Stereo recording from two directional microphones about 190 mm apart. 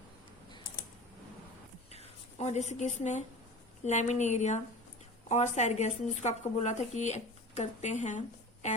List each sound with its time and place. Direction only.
1.9 s speech: 35° left (ahead or behind)